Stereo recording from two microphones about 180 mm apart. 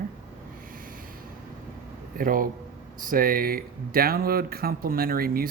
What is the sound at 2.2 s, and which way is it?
Speech, 50° right (ahead or behind).